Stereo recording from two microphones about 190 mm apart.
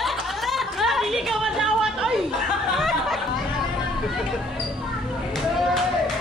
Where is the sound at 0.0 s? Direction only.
Centre (ahead or behind).